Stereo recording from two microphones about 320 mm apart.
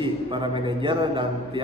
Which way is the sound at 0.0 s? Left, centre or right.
Centre.